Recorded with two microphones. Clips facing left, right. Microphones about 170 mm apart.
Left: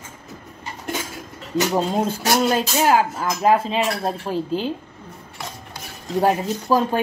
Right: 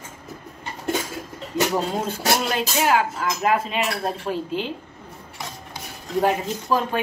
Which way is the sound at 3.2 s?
35° left (ahead or behind).